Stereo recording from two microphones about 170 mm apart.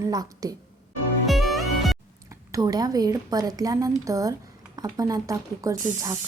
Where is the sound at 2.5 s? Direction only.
20° right (ahead or behind).